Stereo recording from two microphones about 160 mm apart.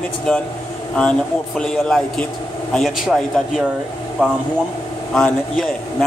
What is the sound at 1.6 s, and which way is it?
A man's voice, 5° left (ahead or behind).